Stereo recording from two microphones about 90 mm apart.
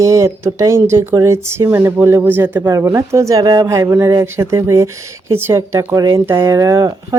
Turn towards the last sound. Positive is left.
turn(degrees=-35)  # may be behind; listen again after turning